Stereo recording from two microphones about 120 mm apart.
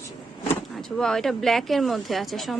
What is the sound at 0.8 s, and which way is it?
Speech, 5° left (ahead or behind).